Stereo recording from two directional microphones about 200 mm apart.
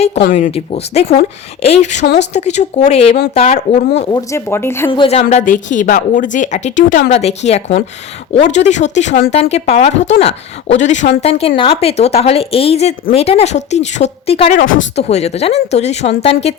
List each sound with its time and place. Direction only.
0.3 s speech: 30° left (ahead or behind)
4.1 s speech: 15° left (ahead or behind)
4.9 s speech: 30° left (ahead or behind)
5.2 s speech: 40° left (ahead or behind)